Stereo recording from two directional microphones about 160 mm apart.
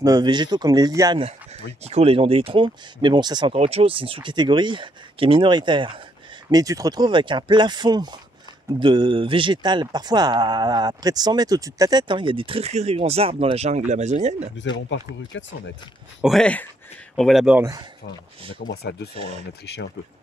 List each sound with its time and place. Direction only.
0.0 s speech: 25° right (ahead or behind)
1.9 s speech: 40° right (ahead or behind)
3.5 s speech: 40° right (ahead or behind)
16.2 s speech: centre (ahead or behind)
17.6 s speech: 20° right (ahead or behind)
18.6 s speech: 85° left